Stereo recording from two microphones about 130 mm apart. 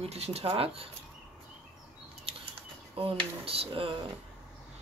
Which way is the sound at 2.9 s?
45° right (ahead or behind).